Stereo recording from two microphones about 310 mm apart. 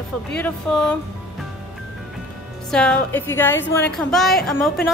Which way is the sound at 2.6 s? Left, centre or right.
Centre.